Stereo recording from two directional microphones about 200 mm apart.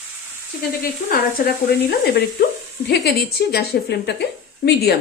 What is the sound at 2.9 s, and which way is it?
A woman's voice, 50° left (ahead or behind).